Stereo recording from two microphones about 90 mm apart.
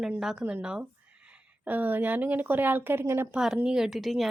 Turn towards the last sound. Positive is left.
turn(degrees=0)  # may be behind; listen again after turning